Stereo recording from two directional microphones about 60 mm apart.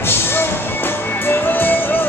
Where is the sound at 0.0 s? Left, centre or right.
Left.